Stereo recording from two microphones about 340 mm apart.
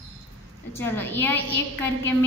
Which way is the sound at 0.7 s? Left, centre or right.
Centre.